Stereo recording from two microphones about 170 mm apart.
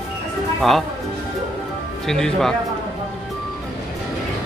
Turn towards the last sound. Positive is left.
turn(degrees=5)  # may be behind; listen again after turning